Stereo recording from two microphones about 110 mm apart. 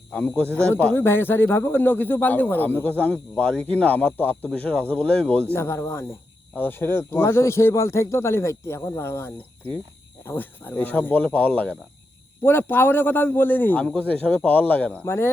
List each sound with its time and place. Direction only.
0.1 s speech: 15° left (ahead or behind)
5.5 s speech: 25° left (ahead or behind)